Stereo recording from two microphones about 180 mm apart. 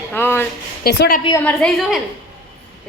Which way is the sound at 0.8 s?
55° left (ahead or behind).